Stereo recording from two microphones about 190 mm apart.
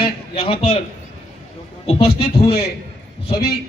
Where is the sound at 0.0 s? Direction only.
30° left (ahead or behind).